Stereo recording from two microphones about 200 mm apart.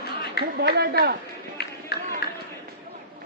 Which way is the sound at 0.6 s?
55° right (ahead or behind).